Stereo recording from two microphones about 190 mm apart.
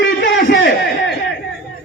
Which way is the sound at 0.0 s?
65° left (ahead or behind).